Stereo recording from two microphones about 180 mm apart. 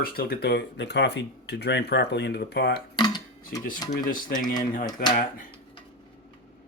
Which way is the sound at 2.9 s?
25° left (ahead or behind).